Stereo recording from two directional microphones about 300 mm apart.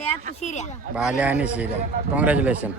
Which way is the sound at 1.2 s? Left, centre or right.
Centre.